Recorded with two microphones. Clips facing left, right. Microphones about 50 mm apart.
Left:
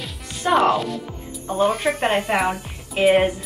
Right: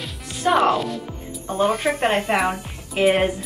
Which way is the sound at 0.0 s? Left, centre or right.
Centre.